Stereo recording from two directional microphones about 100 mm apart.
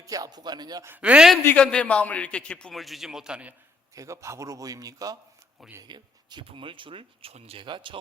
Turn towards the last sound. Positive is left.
turn(degrees=-55)  # may be behind; listen again after turning